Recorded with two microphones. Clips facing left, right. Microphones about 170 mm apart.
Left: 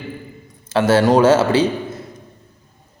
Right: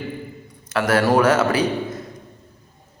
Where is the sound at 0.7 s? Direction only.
25° left (ahead or behind).